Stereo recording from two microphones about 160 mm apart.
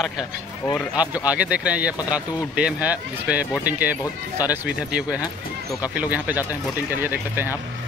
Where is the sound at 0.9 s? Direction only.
10° right (ahead or behind).